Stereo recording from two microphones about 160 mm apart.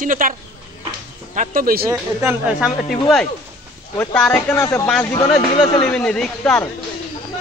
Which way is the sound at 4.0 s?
10° left (ahead or behind).